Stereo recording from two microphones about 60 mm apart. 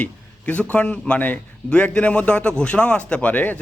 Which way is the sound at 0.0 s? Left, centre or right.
Left.